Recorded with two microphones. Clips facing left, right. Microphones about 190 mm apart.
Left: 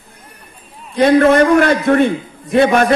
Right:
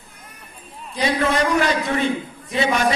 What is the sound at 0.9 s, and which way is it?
A man's voice, 55° left (ahead or behind).